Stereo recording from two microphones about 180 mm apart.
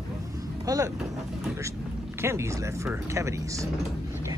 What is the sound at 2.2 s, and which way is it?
Speech, 15° right (ahead or behind).